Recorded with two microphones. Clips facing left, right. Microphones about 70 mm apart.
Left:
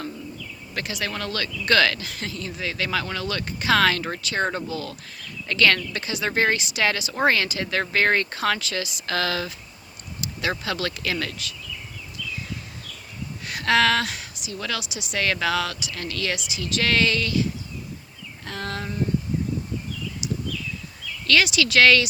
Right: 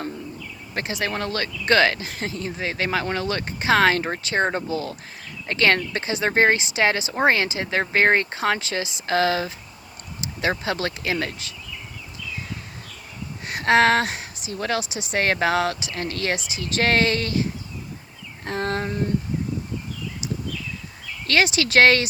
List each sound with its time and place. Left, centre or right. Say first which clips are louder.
0.7 s speech: right 3 dB; right
13.4 s a woman's voice: right 3 dB; right
20.2 s a sound: left 1 dB; right
21.2 s a woman's voice: even; right